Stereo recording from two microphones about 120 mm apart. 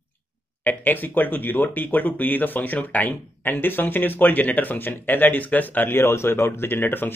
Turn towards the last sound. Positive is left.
turn(degrees=15)  # may be behind; listen again after turning